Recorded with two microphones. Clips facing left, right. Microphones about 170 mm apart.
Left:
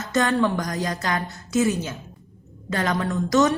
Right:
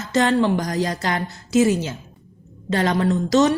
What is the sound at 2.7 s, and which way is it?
Speech, 30° right (ahead or behind).